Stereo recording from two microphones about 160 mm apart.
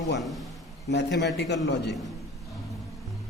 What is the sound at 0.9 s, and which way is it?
Speech, 90° left.